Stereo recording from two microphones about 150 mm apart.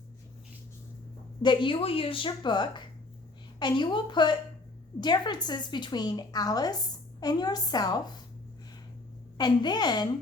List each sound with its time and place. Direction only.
1.4 s a woman's voice: 30° left (ahead or behind)
9.4 s a woman's voice: 30° left (ahead or behind)